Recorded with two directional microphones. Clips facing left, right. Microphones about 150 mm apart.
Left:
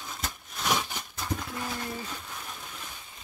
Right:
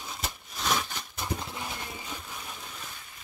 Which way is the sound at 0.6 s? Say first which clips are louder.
Left 1 dB; 10° left (ahead or behind).